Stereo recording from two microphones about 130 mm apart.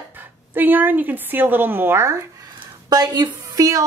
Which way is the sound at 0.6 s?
15° right (ahead or behind).